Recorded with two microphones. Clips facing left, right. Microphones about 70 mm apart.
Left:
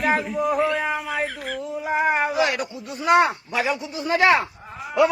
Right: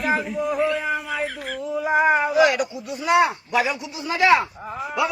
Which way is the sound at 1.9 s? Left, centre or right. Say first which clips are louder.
Right 3 dB; right.